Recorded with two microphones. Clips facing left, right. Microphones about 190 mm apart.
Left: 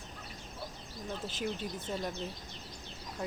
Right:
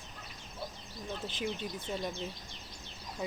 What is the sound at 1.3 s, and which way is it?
Speech, 45° left (ahead or behind).